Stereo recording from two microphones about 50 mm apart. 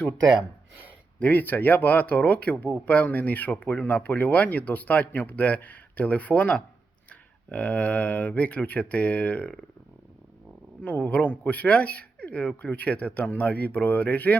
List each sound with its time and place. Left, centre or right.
1.2 s speech: left
10.8 s speech: left